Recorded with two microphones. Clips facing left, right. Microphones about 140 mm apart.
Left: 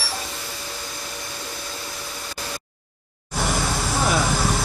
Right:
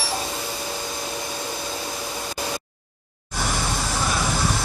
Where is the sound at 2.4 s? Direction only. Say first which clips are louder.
Right 5 dB; 15° right (ahead or behind).